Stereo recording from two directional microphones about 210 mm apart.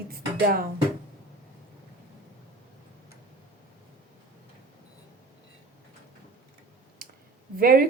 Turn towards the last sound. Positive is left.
turn(degrees=-45)  # may be behind; listen again after turning